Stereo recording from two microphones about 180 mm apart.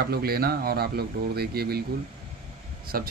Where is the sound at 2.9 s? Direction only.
55° right (ahead or behind).